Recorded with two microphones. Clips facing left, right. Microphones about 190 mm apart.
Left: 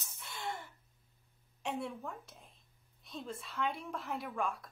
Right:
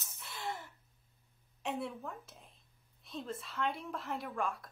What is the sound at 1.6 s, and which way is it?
A woman's voice, centre (ahead or behind).